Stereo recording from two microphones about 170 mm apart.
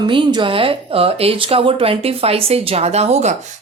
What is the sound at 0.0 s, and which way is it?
A woman's voice, 25° right (ahead or behind).